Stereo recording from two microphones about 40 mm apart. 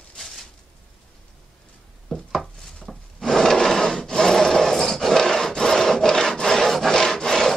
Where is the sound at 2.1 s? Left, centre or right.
Centre.